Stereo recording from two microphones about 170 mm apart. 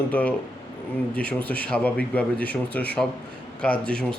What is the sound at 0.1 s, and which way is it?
Speech, 10° left (ahead or behind).